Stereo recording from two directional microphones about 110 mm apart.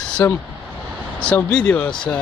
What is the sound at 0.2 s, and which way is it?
Speech, 25° left (ahead or behind).